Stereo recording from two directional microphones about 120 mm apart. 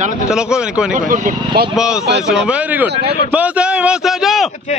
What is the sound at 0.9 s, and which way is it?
Speech, 90° right.